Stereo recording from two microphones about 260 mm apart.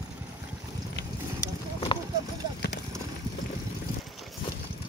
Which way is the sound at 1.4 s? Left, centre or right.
Centre.